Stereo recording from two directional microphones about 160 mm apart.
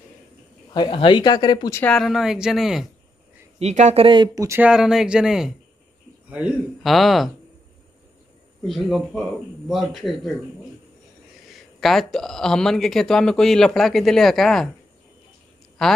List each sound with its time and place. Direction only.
0.7 s speech: 30° left (ahead or behind)
1.8 s speech: 5° left (ahead or behind)
3.5 s speech: 45° right (ahead or behind); by 4.5 s 30° right (ahead or behind)
4.5 s a man's voice: 10° right (ahead or behind)
8.6 s speech: centre (ahead or behind)
11.8 s speech: centre (ahead or behind)
15.8 s speech: 5° left (ahead or behind)